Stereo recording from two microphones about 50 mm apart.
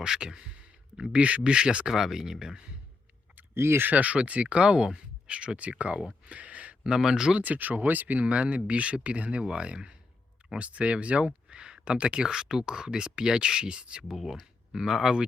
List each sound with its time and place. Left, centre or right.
0.0 s speech: centre
1.9 s speech: centre
3.5 s speech: right
3.8 s speech: right; by 6.1 s centre
6.2 s a sound: right
6.9 s speech: centre
7.3 s speech: right
14.1 s speech: centre